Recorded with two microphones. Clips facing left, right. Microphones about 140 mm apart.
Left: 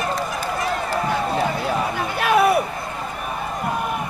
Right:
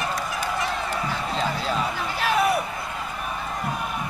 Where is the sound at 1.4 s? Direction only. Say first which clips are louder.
Left 3 dB; 60° left (ahead or behind).